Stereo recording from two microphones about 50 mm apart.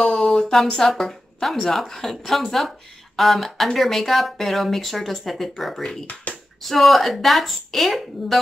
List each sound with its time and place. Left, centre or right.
0.2 s a woman's voice: centre
6.3 s a sound: left
6.6 s speech: centre